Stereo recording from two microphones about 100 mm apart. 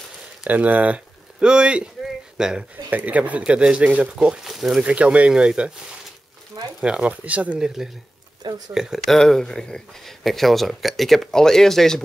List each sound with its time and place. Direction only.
0.4 s speech: 15° right (ahead or behind)
6.8 s speech: 10° right (ahead or behind)
8.5 s speech: 40° right (ahead or behind)
8.7 s speech: 5° right (ahead or behind)